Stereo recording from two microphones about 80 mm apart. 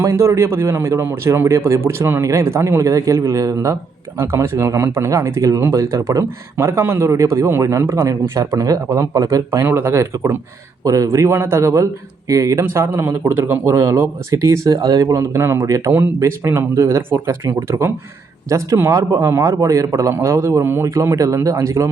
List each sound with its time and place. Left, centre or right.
0.0 s speech: right
9.6 s speech: right
10.8 s speech: right
11.3 s speech: right
12.6 s speech: right
15.6 s speech: right